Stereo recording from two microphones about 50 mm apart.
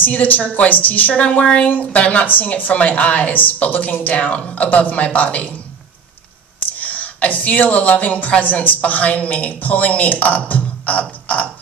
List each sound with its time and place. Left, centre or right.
0.0 s speech: left
6.8 s a woman's voice: left
10.5 s music: left